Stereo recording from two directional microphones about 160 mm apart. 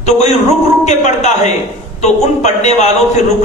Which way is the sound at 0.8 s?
45° left (ahead or behind).